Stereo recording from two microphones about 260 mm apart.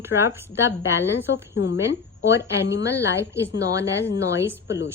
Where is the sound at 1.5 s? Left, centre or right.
Left.